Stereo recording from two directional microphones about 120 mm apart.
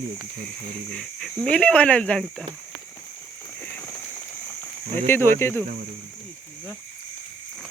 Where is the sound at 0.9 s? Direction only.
5° left (ahead or behind).